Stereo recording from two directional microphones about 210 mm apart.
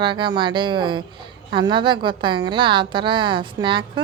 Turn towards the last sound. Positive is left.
turn(degrees=-20)  # may be behind; listen again after turning